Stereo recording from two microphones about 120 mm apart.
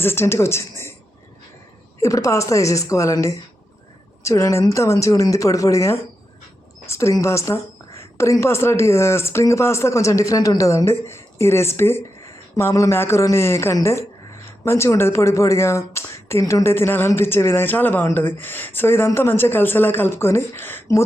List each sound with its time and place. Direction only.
0.0 s speech: 20° left (ahead or behind)
2.0 s speech: 25° left (ahead or behind)